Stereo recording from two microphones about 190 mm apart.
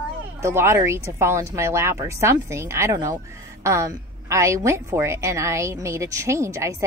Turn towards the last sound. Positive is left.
turn(degrees=-15)  # may be behind; listen again after turning